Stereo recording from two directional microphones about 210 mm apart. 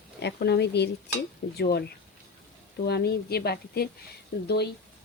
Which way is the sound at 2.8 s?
50° left (ahead or behind).